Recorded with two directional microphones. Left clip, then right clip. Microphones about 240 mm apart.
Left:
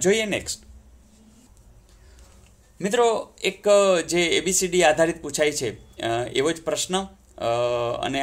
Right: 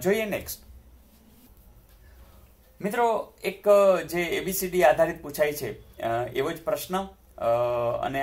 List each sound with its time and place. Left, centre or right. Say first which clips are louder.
0.0 s speech: left 4 dB; left
2.8 s speech: left 4 dB; left